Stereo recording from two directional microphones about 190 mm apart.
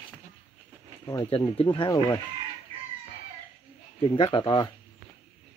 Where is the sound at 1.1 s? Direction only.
25° left (ahead or behind).